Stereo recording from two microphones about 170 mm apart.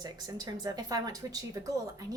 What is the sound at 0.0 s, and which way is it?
A woman's voice, 25° right (ahead or behind).